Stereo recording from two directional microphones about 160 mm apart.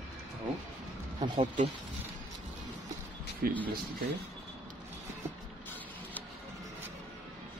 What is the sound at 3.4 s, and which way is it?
Speech, 65° right (ahead or behind).